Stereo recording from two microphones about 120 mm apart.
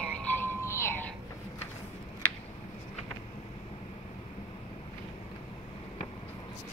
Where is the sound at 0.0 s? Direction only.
15° left (ahead or behind).